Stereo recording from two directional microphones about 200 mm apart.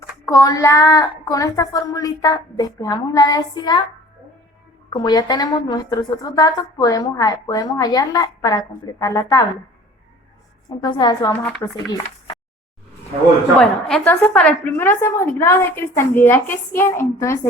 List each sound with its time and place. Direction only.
0.3 s a woman's voice: 15° left (ahead or behind)
4.9 s a woman's voice: 20° left (ahead or behind)
10.8 s a woman's voice: 20° left (ahead or behind)
11.4 s a woman's voice: 5° left (ahead or behind)
11.9 s a sound: 20° left (ahead or behind)
13.6 s a woman's voice: centre (ahead or behind)